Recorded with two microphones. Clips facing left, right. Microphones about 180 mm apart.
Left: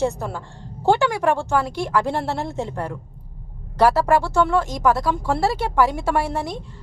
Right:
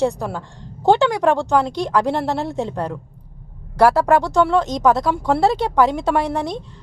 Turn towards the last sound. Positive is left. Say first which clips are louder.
# right 3 dB
turn(degrees=-20)  # may be behind; listen again after turning